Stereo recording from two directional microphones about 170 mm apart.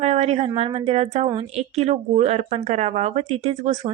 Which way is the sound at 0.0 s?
40° right (ahead or behind).